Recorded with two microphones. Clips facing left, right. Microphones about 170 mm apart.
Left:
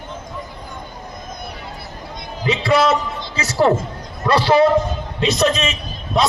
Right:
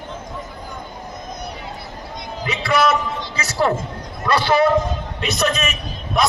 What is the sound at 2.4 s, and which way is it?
Music, 30° left (ahead or behind).